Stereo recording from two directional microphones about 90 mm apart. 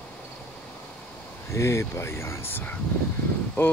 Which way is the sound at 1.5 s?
35° left (ahead or behind).